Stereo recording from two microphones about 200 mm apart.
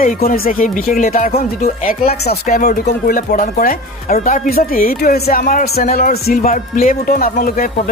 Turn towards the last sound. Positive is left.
turn(degrees=45)  # may be behind; listen again after turning